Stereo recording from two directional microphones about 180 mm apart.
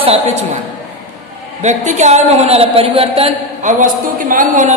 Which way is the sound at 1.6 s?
40° right (ahead or behind).